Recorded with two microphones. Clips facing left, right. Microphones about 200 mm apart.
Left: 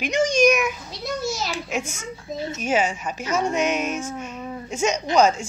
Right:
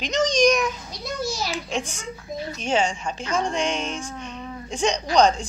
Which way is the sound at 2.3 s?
25° left (ahead or behind).